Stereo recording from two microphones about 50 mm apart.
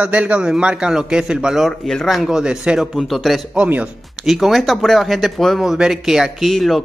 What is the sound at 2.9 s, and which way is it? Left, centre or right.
Speech, centre.